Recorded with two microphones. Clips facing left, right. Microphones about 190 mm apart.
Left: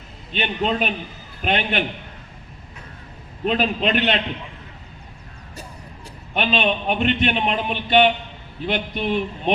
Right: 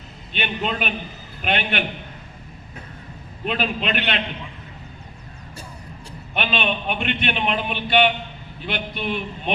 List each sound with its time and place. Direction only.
0.3 s a man's voice: 35° left (ahead or behind)
3.4 s a man's voice: 40° left (ahead or behind)
6.3 s a man's voice: 40° left (ahead or behind)